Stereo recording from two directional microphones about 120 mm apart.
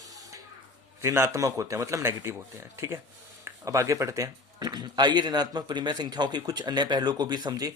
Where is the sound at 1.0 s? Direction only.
25° right (ahead or behind).